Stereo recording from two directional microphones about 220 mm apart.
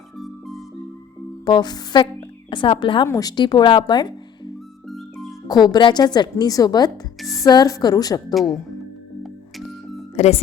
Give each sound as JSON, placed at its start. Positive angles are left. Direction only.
{"t": 0.2, "sound": "music", "side_deg": 0}
{"t": 1.5, "sound": "a woman's voice", "side_deg": 20}
{"t": 4.9, "sound": "music", "side_deg": 0}
{"t": 5.5, "sound": "a woman's voice", "side_deg": 20}
{"t": 10.2, "sound": "a woman's voice", "side_deg": 30}